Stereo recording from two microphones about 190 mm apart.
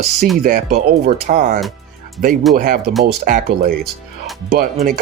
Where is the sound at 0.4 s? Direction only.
50° right (ahead or behind).